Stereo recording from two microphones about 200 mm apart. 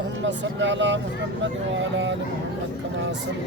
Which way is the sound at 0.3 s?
65° right (ahead or behind).